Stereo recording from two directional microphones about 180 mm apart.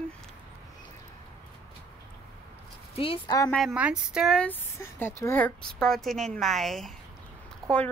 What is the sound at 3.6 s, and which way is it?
Speech, 5° right (ahead or behind).